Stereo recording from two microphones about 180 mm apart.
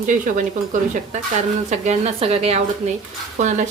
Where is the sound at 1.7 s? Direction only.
35° right (ahead or behind).